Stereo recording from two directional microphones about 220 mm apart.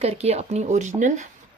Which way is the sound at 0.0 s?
30° right (ahead or behind).